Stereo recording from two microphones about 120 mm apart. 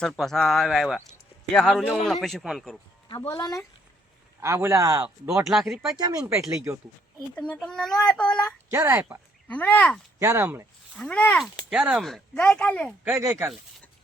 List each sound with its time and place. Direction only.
0.0 s speech: 5° left (ahead or behind)
3.3 s speech: 35° left (ahead or behind)
4.4 s a man's voice: 20° right (ahead or behind)
5.0 s speech: 10° right (ahead or behind)
6.0 s a man's voice: 30° right (ahead or behind)
7.3 s a child's voice: 10° left (ahead or behind)
8.7 s a man's voice: 20° right (ahead or behind)
9.5 s a child's voice: 15° left (ahead or behind)
10.2 s a man's voice: 20° right (ahead or behind)
10.9 s a child's voice: 10° left (ahead or behind)
11.7 s speech: 5° right (ahead or behind); by 12.9 s 10° left (ahead or behind)
13.1 s a man's voice: 20° right (ahead or behind)